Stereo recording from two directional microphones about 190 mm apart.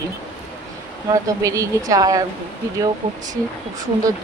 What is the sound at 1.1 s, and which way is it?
Speech, 15° right (ahead or behind).